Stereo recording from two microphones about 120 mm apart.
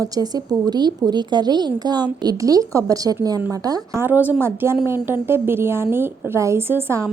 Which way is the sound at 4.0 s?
15° right (ahead or behind).